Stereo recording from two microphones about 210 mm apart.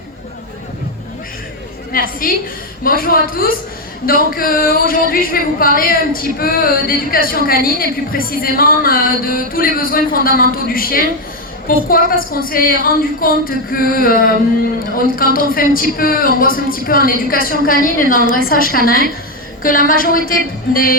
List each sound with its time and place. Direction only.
1.9 s a woman's voice: 40° left (ahead or behind)